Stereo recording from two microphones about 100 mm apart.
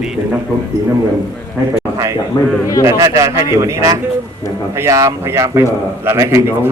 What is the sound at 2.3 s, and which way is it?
Speech, 30° left (ahead or behind).